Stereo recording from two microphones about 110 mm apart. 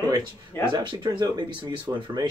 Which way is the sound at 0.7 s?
45° right (ahead or behind).